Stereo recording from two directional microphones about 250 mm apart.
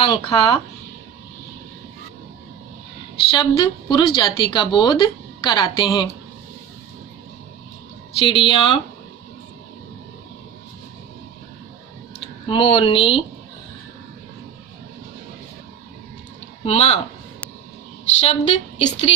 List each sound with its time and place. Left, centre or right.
0.0 s a woman's voice: centre
3.2 s a woman's voice: left
8.2 s a woman's voice: left
12.5 s a woman's voice: left
16.6 s a woman's voice: left
18.2 s a woman's voice: left